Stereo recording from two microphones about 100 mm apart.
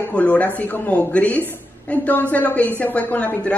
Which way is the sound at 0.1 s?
15° left (ahead or behind).